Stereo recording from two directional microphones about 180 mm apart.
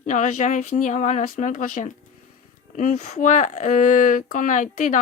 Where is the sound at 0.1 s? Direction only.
45° left (ahead or behind).